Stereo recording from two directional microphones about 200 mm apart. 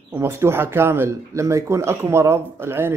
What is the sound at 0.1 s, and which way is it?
Speech, 10° right (ahead or behind).